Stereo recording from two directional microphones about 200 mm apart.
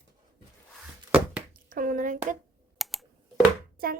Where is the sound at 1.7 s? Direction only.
45° right (ahead or behind).